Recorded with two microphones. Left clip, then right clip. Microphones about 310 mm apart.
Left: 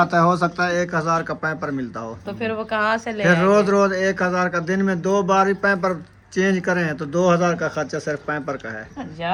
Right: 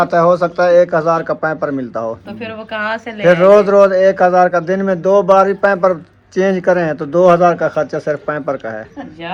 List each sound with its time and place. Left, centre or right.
0.0 s speech: centre
2.4 s a woman's voice: left
3.5 s speech: centre